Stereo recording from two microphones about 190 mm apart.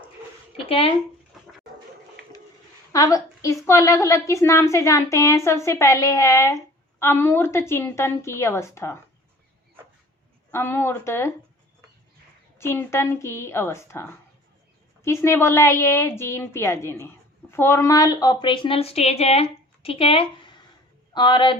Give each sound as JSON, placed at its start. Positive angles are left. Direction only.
{"t": 0.5, "sound": "speech", "side_deg": 30}
{"t": 2.9, "sound": "a woman's voice", "side_deg": 20}
{"t": 10.5, "sound": "a woman's voice", "side_deg": 10}
{"t": 12.5, "sound": "a woman's voice", "side_deg": 15}